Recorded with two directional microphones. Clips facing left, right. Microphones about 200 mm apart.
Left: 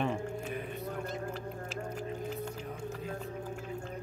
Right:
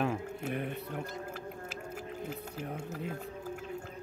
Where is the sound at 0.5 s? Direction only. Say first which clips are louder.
Right 3 dB; 65° right (ahead or behind).